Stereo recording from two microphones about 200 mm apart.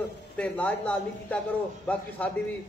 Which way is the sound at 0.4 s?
5° left (ahead or behind).